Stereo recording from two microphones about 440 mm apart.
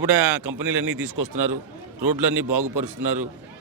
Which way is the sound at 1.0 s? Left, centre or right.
Right.